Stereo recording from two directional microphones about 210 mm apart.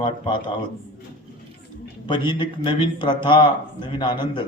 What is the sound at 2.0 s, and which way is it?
A man's voice, 20° left (ahead or behind).